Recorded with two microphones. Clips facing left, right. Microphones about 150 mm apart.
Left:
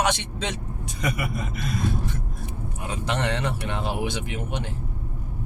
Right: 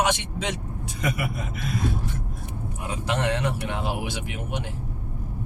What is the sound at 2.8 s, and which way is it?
Speech, 10° right (ahead or behind).